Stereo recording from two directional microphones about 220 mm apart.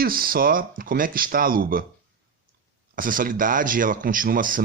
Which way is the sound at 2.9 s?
40° right (ahead or behind).